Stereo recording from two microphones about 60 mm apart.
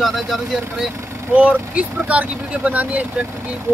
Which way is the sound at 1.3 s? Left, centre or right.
Right.